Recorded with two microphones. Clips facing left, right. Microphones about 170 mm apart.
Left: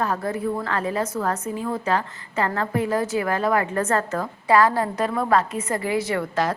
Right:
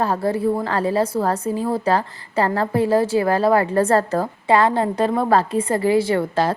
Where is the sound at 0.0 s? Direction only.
30° right (ahead or behind).